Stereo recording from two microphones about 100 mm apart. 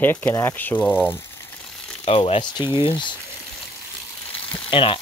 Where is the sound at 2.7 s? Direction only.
50° left (ahead or behind).